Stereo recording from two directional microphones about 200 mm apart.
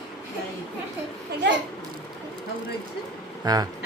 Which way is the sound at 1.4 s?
60° right (ahead or behind).